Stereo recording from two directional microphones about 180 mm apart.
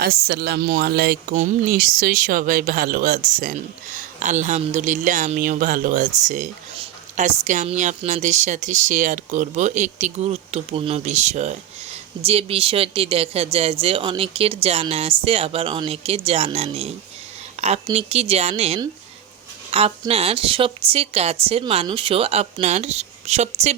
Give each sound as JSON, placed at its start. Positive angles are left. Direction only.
{"t": 0.0, "sound": "speech", "side_deg": -60}
{"t": 1.3, "sound": "a woman's voice", "side_deg": -45}